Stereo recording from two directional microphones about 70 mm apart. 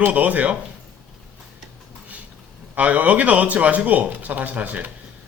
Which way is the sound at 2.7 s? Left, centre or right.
Right.